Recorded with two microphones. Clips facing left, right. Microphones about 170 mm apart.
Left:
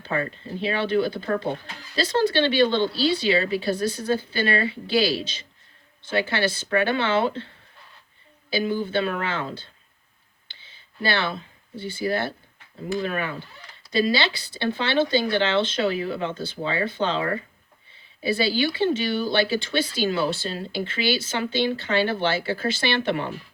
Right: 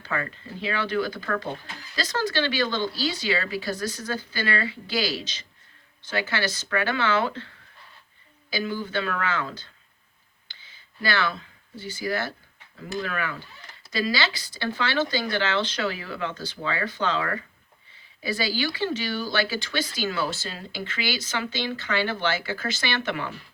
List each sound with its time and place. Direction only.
0.0 s speech: 25° left (ahead or behind)
10.5 s a sound: 25° left (ahead or behind)
11.9 s speech: 30° left (ahead or behind)